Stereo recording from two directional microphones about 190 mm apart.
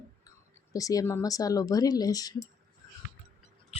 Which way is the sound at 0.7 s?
20° left (ahead or behind).